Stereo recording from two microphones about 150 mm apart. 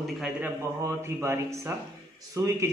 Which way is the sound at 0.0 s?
5° right (ahead or behind).